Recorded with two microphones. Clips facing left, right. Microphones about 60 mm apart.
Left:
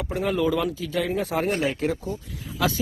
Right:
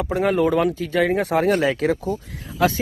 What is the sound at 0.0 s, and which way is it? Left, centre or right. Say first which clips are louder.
Speech: right 5 dB; right.